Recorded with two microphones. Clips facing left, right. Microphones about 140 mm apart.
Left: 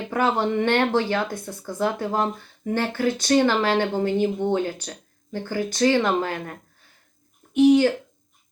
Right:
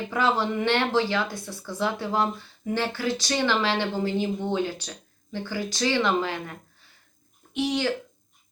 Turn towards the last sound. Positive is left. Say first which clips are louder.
# left 10 dB
turn(degrees=50)  # may be behind; listen again after turning